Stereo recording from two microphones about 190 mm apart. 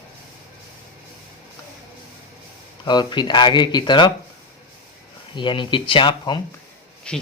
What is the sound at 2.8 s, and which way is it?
Speech, 20° left (ahead or behind).